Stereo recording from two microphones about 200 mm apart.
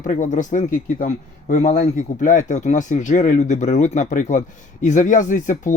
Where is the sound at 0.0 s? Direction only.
40° left (ahead or behind).